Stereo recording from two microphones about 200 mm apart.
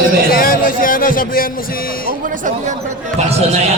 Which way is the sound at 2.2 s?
40° right (ahead or behind).